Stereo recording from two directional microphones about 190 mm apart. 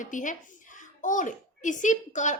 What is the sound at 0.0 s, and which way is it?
Speech, 40° left (ahead or behind).